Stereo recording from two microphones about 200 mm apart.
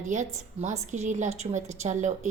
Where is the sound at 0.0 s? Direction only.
35° right (ahead or behind).